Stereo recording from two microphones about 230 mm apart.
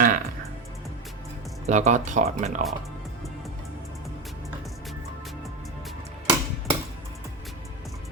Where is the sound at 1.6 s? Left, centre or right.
Right.